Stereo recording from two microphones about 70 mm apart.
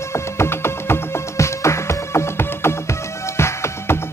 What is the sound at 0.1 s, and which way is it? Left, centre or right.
Music, left.